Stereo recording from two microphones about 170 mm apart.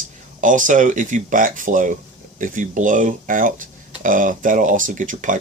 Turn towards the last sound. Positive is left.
turn(degrees=-50)  # may be behind; listen again after turning